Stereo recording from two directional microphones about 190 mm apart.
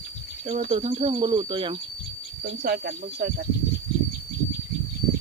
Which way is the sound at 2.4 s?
50° right (ahead or behind).